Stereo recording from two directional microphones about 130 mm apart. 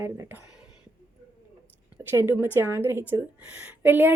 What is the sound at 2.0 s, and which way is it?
Speech, 15° right (ahead or behind).